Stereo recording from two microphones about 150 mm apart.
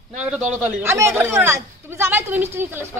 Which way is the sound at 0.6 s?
15° right (ahead or behind).